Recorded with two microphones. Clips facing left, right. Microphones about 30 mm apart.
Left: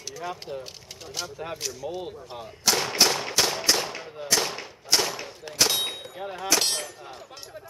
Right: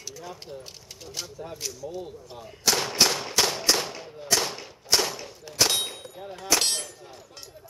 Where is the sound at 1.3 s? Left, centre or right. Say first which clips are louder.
Left 3 dB; left.